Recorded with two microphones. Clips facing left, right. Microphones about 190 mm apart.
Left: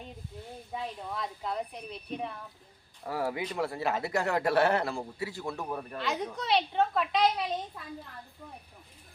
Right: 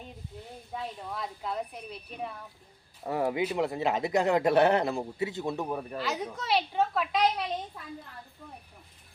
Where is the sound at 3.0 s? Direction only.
20° right (ahead or behind).